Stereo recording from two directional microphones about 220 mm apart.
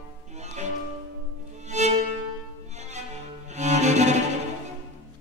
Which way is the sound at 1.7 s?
30° right (ahead or behind).